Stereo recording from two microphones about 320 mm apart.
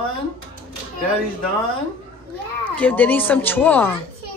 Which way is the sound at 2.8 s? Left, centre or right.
Centre.